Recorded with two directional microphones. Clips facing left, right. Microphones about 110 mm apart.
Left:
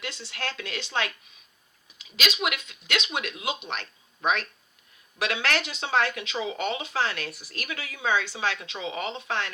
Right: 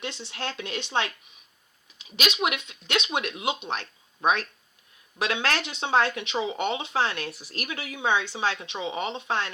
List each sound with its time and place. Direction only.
0.0 s speech: 25° right (ahead or behind)